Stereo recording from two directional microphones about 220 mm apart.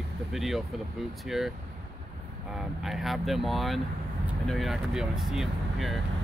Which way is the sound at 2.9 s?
Centre (ahead or behind).